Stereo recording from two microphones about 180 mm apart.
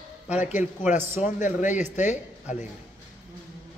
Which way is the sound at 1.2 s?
45° left (ahead or behind).